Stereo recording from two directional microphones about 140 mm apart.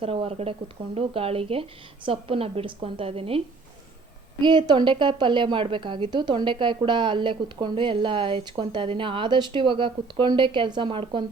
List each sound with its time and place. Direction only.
0.0 s a woman's voice: 45° right (ahead or behind)